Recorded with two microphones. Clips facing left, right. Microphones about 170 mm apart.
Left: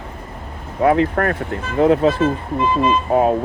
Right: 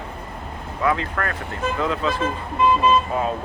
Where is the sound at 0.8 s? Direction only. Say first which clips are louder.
Left 8 dB; 55° left (ahead or behind).